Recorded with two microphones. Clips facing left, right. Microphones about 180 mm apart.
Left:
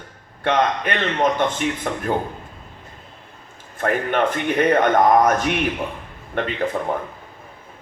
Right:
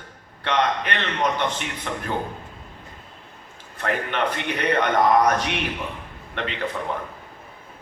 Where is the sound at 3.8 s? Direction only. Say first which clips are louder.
Left 5 dB; 50° left (ahead or behind).